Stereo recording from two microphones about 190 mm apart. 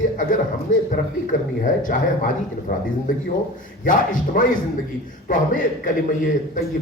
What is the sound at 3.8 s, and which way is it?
Speech, 45° left (ahead or behind).